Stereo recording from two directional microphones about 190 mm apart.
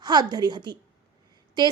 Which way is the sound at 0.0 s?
20° right (ahead or behind).